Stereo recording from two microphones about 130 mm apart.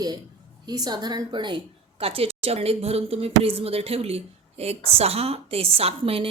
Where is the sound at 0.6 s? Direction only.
30° right (ahead or behind).